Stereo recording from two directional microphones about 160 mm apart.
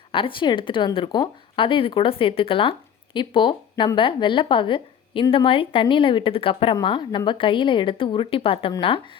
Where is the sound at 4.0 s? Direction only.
30° left (ahead or behind).